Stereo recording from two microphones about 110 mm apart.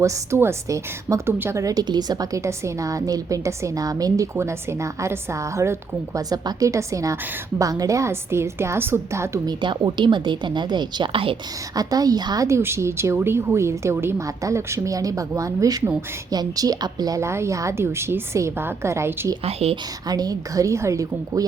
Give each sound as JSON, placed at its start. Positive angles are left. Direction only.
{"t": 0.0, "sound": "a woman's voice", "side_deg": -25}
{"t": 9.5, "sound": "speech", "side_deg": -45}
{"t": 11.8, "sound": "a woman's voice", "side_deg": -35}
{"t": 12.5, "sound": "a woman's voice", "side_deg": -25}
{"t": 19.5, "sound": "speech", "side_deg": -65}
{"t": 19.7, "sound": "a woman's voice", "side_deg": -35}